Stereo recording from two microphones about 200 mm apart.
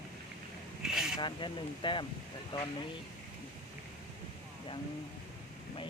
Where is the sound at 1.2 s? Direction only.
25° left (ahead or behind).